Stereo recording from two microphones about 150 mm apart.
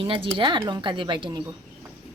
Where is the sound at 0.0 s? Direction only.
35° right (ahead or behind).